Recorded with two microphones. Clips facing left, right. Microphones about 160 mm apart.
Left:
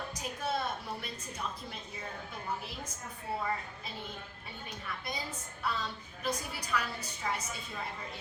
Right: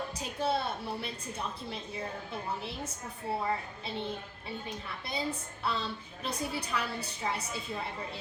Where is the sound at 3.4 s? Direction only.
25° right (ahead or behind).